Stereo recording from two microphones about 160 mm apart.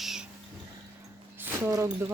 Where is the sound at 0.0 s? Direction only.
5° right (ahead or behind).